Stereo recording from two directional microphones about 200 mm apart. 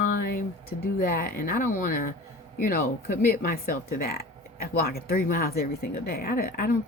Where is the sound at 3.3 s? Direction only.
45° left (ahead or behind).